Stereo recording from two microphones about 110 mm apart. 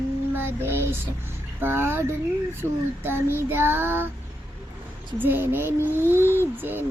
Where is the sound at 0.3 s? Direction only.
20° right (ahead or behind).